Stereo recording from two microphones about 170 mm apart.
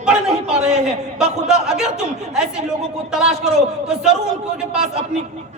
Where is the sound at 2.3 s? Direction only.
5° right (ahead or behind).